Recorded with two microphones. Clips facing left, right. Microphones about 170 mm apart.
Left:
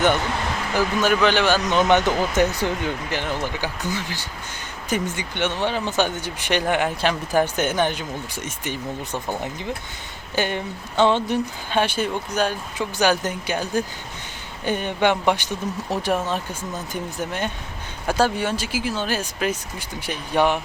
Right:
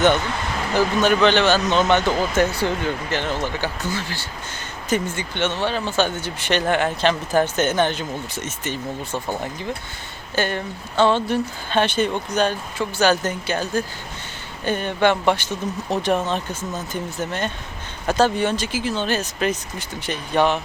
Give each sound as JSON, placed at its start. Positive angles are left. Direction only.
{"t": 1.0, "sound": "speech", "side_deg": 10}